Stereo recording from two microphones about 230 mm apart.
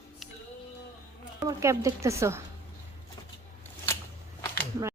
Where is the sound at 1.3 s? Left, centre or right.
Centre.